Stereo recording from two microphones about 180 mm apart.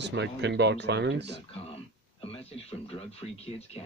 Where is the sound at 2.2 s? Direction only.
35° left (ahead or behind).